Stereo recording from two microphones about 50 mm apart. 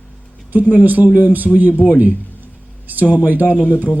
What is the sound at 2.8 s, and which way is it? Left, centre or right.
Speech, right.